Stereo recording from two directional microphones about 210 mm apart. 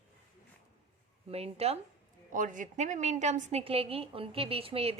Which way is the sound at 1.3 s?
30° right (ahead or behind).